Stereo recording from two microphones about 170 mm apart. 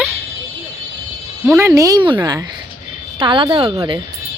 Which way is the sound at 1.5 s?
15° right (ahead or behind).